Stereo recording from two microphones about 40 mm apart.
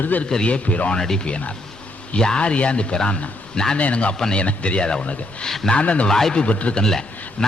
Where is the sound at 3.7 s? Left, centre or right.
Left.